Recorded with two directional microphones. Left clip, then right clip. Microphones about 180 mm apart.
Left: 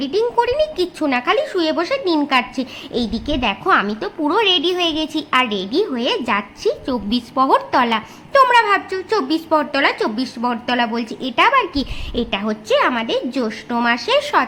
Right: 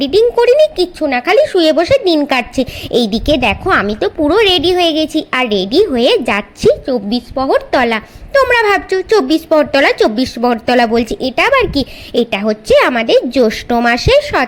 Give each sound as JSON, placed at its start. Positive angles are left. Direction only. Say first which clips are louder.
{"t": 0.0, "sound": "a woman's voice", "louder": "right 8 dB", "side_deg": -25}
{"t": 6.8, "sound": "a woman's voice", "louder": "right 6 dB", "side_deg": -10}
{"t": 14.1, "sound": "speech", "louder": "right 5 dB", "side_deg": -15}